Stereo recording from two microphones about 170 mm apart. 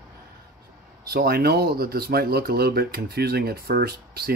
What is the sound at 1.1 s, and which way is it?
Speech, 65° right (ahead or behind).